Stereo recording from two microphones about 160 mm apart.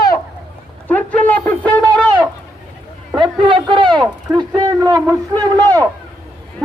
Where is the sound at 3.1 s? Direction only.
30° right (ahead or behind).